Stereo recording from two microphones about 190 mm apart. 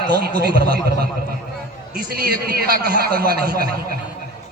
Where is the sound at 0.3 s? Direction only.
55° right (ahead or behind).